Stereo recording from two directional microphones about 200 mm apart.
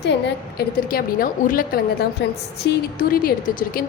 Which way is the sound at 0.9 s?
45° left (ahead or behind).